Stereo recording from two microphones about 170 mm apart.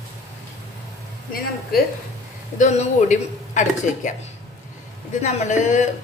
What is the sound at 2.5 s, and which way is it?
A woman's voice, 45° left (ahead or behind).